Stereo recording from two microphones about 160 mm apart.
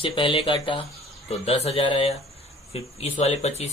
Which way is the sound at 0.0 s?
35° left (ahead or behind).